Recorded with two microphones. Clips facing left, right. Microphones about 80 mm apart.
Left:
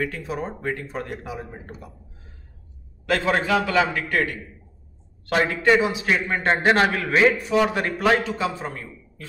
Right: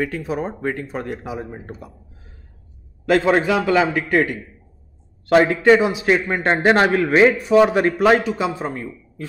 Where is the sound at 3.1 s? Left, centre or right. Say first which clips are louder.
Right 5 dB; right.